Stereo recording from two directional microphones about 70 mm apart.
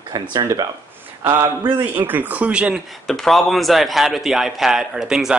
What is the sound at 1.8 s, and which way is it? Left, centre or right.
Speech, right.